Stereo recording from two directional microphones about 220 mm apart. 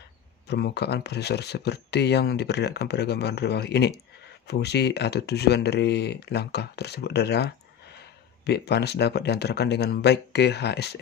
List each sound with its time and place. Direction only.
0.5 s speech: 50° left (ahead or behind)